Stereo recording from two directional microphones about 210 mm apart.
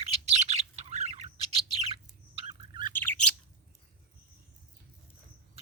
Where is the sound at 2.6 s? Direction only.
20° right (ahead or behind).